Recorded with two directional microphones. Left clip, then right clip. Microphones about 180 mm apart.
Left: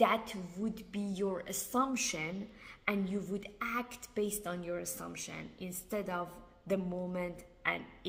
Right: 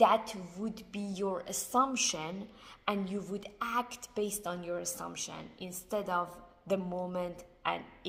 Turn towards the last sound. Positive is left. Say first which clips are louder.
# right 1 dB
turn(degrees=15)  # may be behind; listen again after turning